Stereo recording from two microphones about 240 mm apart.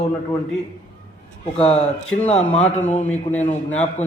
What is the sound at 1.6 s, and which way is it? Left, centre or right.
A man's voice, left.